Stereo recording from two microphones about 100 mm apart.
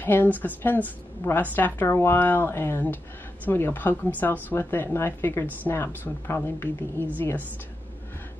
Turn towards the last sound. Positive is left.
turn(degrees=20)  # may be behind; listen again after turning